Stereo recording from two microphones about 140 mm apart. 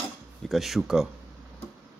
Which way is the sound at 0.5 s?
Centre (ahead or behind).